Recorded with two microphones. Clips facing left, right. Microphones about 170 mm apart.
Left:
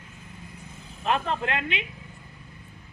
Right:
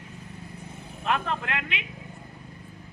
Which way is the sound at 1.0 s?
25° left (ahead or behind).